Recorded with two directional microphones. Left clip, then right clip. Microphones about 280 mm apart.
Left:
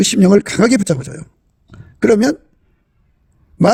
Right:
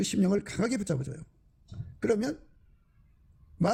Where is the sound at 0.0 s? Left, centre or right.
Left.